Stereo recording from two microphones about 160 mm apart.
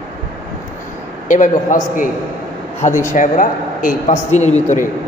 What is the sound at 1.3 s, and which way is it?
A man's voice, 55° left (ahead or behind).